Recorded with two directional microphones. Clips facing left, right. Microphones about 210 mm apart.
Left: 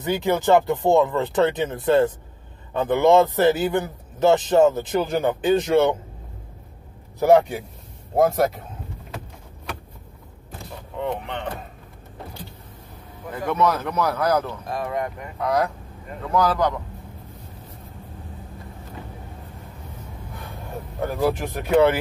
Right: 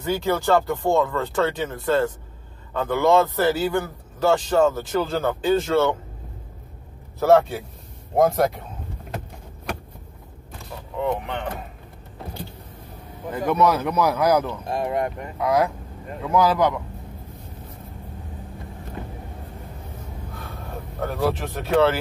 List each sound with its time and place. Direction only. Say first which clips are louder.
0.0 s a man's voice: left 1 dB; 20° left (ahead or behind)
7.2 s speech: left 1 dB; 15° left (ahead or behind)
11.0 s speech: right 2 dB; 5° right (ahead or behind)
13.5 s a man's voice: right 2 dB; 10° right (ahead or behind)
14.7 s speech: right 3 dB; 30° right (ahead or behind)
15.3 s a man's voice: right 1 dB; 5° right (ahead or behind)
21.0 s speech: left 1 dB; 15° left (ahead or behind)